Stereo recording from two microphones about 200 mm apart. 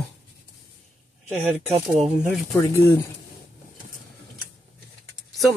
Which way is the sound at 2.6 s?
15° left (ahead or behind).